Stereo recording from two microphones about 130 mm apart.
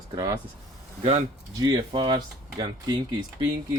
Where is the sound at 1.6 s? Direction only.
35° right (ahead or behind).